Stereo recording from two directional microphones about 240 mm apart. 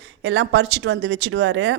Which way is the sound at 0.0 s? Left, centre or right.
Right.